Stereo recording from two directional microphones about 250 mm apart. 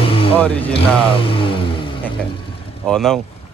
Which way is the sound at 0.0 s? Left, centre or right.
Left.